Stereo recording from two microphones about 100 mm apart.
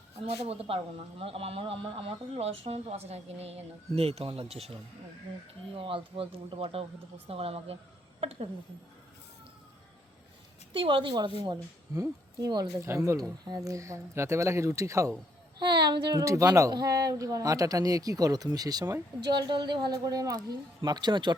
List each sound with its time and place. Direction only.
0.2 s speech: 75° right (ahead or behind); by 4.3 s 90° right
4.3 s a woman's voice: 80° right
5.7 s speech: 60° right (ahead or behind)
7.3 s a woman's voice: 80° right
10.7 s speech: 60° right (ahead or behind); by 12.6 s 40° right (ahead or behind)
12.8 s speech: 30° right (ahead or behind)
15.5 s speech: 45° right (ahead or behind)
16.2 s speech: 35° right (ahead or behind)
19.3 s speech: 50° right (ahead or behind)